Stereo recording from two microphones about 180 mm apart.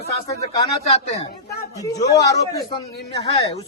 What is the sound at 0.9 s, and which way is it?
Speech, 35° left (ahead or behind).